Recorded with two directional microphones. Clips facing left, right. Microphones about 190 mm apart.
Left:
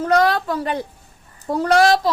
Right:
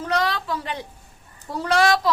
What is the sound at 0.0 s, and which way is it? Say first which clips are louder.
A woman's voice: left 7 dB; 50° left (ahead or behind).